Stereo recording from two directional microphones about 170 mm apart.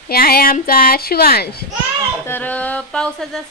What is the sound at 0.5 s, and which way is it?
Speech, 55° left (ahead or behind).